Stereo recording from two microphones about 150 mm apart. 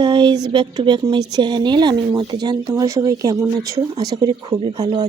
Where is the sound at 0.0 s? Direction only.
30° right (ahead or behind).